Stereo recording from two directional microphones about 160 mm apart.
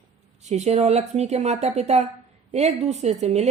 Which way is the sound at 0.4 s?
45° right (ahead or behind).